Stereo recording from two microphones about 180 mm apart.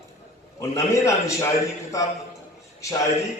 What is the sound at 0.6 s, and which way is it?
A man's voice, 15° left (ahead or behind).